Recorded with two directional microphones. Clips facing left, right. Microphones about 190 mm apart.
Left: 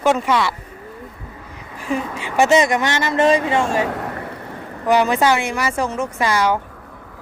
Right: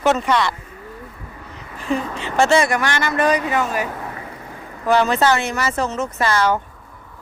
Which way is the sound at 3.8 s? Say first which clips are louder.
Left 4 dB; 70° left (ahead or behind).